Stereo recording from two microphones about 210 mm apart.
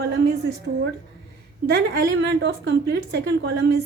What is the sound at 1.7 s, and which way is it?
A woman's voice, 55° right (ahead or behind).